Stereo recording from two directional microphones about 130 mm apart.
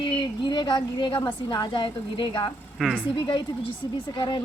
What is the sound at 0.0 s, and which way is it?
A woman's voice, 35° left (ahead or behind).